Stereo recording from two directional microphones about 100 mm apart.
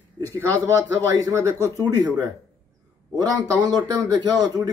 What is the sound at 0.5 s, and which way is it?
A man's voice, 35° right (ahead or behind).